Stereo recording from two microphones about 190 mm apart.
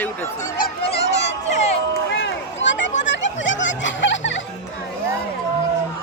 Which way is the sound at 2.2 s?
75° left (ahead or behind).